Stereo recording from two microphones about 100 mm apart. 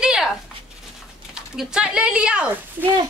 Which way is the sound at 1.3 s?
5° right (ahead or behind).